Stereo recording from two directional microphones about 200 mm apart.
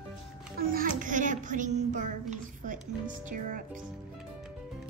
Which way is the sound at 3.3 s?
40° right (ahead or behind).